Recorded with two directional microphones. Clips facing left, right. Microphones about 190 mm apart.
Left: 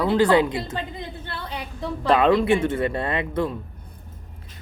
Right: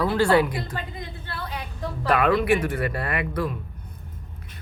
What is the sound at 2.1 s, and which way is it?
Speech, 25° left (ahead or behind).